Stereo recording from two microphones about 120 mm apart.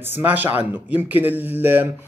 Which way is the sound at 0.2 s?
15° right (ahead or behind).